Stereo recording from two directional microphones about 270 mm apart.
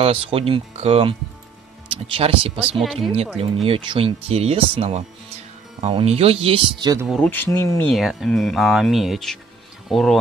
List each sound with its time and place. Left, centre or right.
0.0 s speech: right
2.6 s speech: centre
3.6 s speech: centre
7.1 s speech: centre